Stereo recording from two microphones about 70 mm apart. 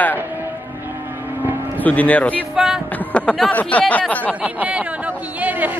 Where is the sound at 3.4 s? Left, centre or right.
Left.